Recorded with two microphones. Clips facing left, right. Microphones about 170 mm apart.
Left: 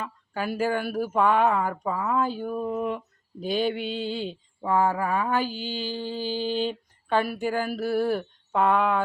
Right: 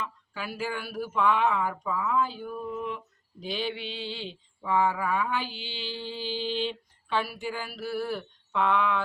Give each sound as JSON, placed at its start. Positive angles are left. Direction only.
{"t": 0.0, "sound": "mantra", "side_deg": 50}